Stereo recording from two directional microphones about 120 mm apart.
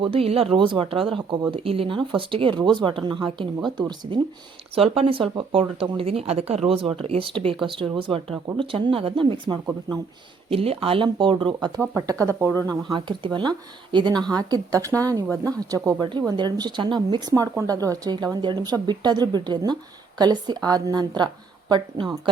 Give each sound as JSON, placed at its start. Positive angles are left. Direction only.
{"t": 0.0, "sound": "speech", "side_deg": -50}
{"t": 4.7, "sound": "speech", "side_deg": -50}
{"t": 10.5, "sound": "speech", "side_deg": -55}
{"t": 11.8, "sound": "speech", "side_deg": -25}
{"t": 16.0, "sound": "speech", "side_deg": -40}